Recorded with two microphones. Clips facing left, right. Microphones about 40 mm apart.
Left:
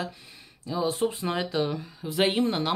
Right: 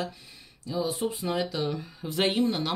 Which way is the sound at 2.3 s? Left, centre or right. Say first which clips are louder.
Left 1 dB; left.